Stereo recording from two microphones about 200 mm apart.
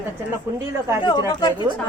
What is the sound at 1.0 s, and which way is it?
Speech, 20° left (ahead or behind).